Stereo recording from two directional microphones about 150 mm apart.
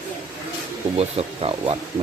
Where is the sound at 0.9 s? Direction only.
40° right (ahead or behind).